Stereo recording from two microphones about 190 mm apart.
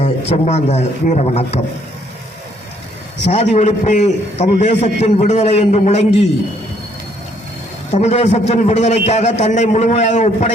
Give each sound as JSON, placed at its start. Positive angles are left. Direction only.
{"t": 0.0, "sound": "a man's voice", "side_deg": 35}
{"t": 3.2, "sound": "a man's voice", "side_deg": 35}
{"t": 7.9, "sound": "a man's voice", "side_deg": 35}